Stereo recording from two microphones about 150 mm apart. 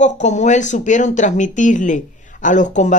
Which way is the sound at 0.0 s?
50° left (ahead or behind).